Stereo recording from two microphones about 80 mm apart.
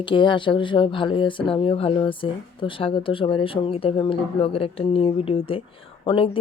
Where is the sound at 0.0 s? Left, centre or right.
Left.